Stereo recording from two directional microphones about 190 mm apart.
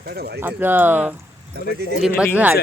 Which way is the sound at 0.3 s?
10° right (ahead or behind).